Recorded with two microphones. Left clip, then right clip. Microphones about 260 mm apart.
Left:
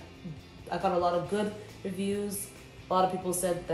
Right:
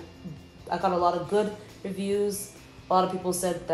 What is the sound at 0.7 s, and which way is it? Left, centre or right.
Speech, right.